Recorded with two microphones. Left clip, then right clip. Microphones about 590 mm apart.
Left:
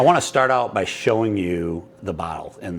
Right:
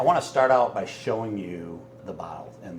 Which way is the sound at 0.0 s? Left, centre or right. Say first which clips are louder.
Left 5 dB; left.